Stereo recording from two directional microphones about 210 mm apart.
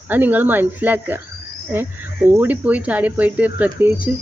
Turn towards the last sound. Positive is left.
turn(degrees=-10)  # may be behind; listen again after turning